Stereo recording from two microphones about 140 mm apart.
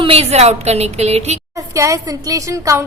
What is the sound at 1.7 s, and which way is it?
A woman's voice, 25° right (ahead or behind).